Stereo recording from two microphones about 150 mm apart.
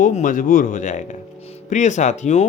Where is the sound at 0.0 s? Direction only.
60° left (ahead or behind).